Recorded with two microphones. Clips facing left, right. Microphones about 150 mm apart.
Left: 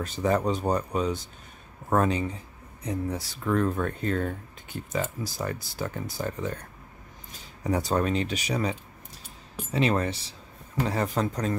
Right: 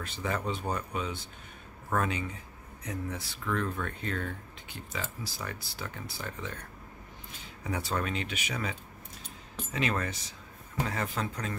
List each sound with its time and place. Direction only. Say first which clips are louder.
0.0 s speech: left 9 dB; 40° left (ahead or behind)
7.6 s speech: left 7 dB; 40° left (ahead or behind)